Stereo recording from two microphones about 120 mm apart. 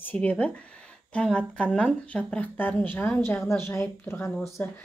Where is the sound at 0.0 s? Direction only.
15° left (ahead or behind).